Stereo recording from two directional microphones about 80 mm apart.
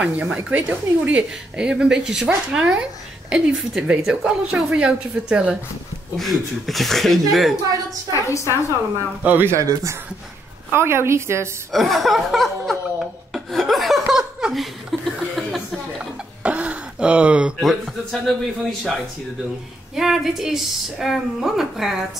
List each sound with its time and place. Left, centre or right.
0.0 s a woman's voice: centre
6.1 s a woman's voice: centre
8.1 s a woman's voice: left
9.2 s speech: right
10.7 s a woman's voice: right
11.7 s a woman's voice: centre
13.3 s laughter: centre
14.0 s laughter: centre
14.5 s chuckle: centre
16.4 s throat clearing: centre
17.6 s a woman's voice: centre
20.0 s a woman's voice: centre